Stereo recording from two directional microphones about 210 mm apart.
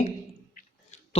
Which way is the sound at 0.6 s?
30° left (ahead or behind).